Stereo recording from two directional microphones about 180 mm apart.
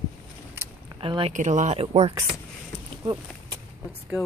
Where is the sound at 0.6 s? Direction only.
10° right (ahead or behind).